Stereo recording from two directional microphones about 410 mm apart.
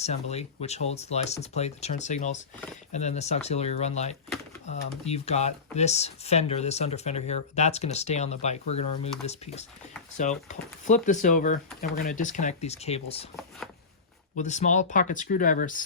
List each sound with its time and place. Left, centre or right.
0.0 s speech: centre
14.3 s speech: centre